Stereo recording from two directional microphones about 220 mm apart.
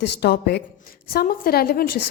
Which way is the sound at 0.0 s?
50° left (ahead or behind).